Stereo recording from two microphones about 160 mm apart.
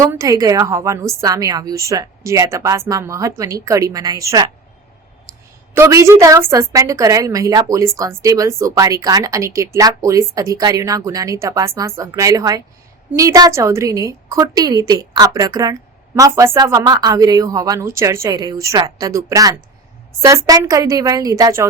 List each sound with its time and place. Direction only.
0.0 s a woman's voice: 20° right (ahead or behind)
5.7 s a woman's voice: 15° right (ahead or behind)